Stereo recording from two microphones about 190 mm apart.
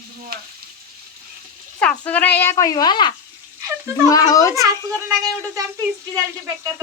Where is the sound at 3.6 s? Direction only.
15° right (ahead or behind).